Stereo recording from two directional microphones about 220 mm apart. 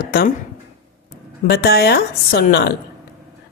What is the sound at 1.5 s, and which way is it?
A woman's voice, 45° left (ahead or behind).